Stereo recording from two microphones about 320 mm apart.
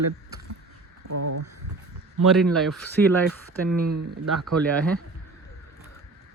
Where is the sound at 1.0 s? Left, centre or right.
Right.